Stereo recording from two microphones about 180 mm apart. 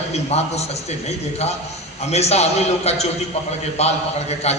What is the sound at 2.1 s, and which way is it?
A man's voice, 35° left (ahead or behind).